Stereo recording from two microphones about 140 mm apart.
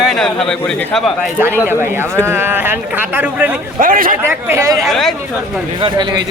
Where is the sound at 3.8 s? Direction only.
80° right.